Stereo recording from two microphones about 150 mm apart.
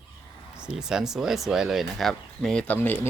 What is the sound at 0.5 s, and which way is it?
Speech, 5° right (ahead or behind).